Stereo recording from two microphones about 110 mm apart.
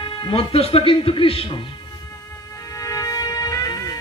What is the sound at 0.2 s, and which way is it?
Speech, 55° left (ahead or behind).